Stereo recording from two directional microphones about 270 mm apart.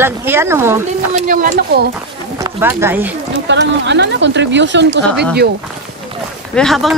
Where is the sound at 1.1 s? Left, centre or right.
Right.